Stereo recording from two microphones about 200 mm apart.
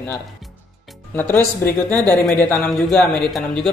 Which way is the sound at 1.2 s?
10° left (ahead or behind).